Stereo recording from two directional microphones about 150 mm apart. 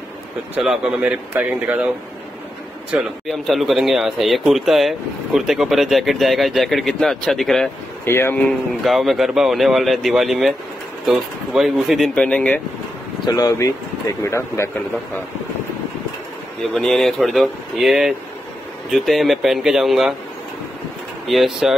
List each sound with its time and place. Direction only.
0.6 s speech: 5° right (ahead or behind)
2.9 s speech: 5° right (ahead or behind)
8.0 s speech: 15° left (ahead or behind)
8.8 s speech: centre (ahead or behind)
13.3 s speech: 25° left (ahead or behind)
16.7 s speech: centre (ahead or behind)
21.3 s speech: centre (ahead or behind)